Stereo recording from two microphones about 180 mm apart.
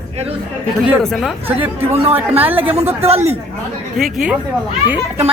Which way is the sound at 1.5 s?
10° right (ahead or behind).